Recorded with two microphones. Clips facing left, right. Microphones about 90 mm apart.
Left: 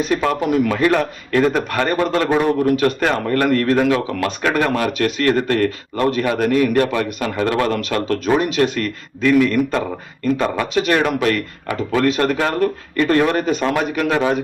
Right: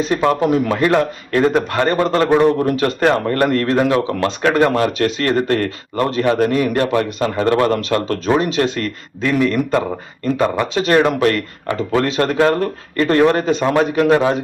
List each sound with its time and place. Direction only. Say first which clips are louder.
0.3 s speech: right 4 dB; 35° right (ahead or behind)
0.7 s a man's voice: right 1 dB; 25° right (ahead or behind)
10.8 s speech: right 5 dB; 35° right (ahead or behind)